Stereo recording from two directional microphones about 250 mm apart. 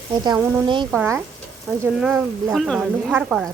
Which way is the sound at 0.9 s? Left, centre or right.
Centre.